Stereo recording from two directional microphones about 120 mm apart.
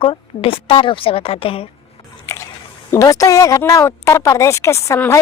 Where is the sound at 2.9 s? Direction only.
25° left (ahead or behind).